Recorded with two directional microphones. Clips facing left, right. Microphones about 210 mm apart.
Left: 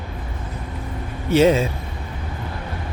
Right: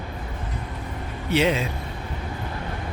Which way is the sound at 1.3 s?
45° left (ahead or behind).